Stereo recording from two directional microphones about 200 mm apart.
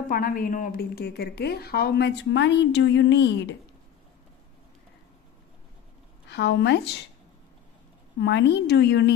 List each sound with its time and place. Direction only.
0.0 s a woman's voice: 45° left (ahead or behind); by 3.5 s 65° left (ahead or behind)
6.2 s a woman's voice: 60° left (ahead or behind)
8.2 s a woman's voice: 60° left (ahead or behind)